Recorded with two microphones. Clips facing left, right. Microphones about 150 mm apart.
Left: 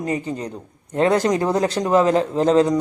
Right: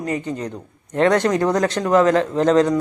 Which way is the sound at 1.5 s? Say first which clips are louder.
Right 1 dB; 30° left (ahead or behind).